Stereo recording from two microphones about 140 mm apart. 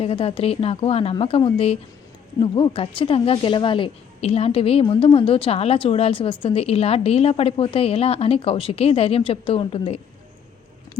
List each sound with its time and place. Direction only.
0.0 s speech: 40° left (ahead or behind)